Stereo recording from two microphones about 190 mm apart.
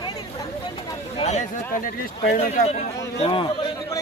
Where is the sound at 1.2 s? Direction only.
35° left (ahead or behind).